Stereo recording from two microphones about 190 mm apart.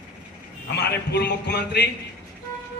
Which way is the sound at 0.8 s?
60° left (ahead or behind).